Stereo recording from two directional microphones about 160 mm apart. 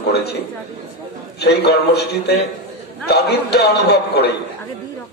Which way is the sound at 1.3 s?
90° left.